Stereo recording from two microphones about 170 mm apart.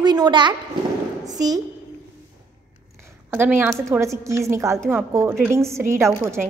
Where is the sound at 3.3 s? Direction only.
10° right (ahead or behind).